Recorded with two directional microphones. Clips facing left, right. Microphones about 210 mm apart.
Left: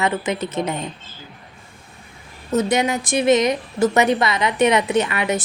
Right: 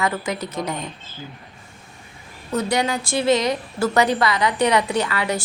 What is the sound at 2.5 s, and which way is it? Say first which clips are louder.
A woman's voice: left 3 dB; 20° left (ahead or behind).